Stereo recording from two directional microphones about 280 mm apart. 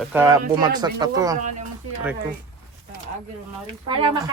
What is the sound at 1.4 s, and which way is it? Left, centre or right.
Speech, right.